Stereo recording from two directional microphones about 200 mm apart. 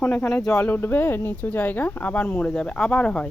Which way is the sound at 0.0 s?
5° left (ahead or behind).